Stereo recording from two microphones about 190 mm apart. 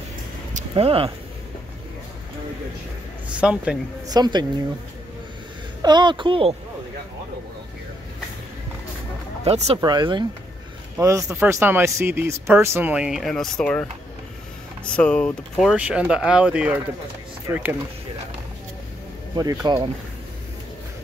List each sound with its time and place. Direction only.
0.5 s a sound: 35° right (ahead or behind)
3.3 s speech: 5° right (ahead or behind)
4.1 s speech: 20° right (ahead or behind)
5.8 s speech: 25° right (ahead or behind)
9.4 s speech: 35° right (ahead or behind)
9.8 s speech: 20° right (ahead or behind); by 13.8 s 5° left (ahead or behind)
15.0 s speech: 5° left (ahead or behind)
19.3 s speech: 20° right (ahead or behind)